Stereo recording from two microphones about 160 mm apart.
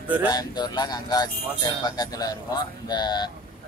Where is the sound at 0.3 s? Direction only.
25° left (ahead or behind).